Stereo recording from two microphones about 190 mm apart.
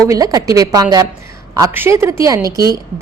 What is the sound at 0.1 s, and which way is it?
A woman's voice, 20° right (ahead or behind).